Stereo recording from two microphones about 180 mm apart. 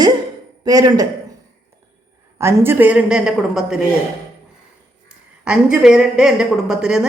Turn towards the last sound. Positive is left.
turn(degrees=-5)  # may be behind; listen again after turning